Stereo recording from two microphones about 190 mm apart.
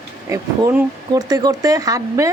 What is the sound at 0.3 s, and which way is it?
Speech, 10° right (ahead or behind).